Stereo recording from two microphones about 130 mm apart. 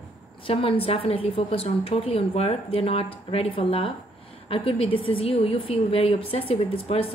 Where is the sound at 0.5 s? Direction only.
45° left (ahead or behind).